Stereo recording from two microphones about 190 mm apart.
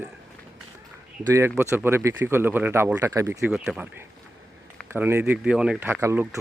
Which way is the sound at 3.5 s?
5° right (ahead or behind).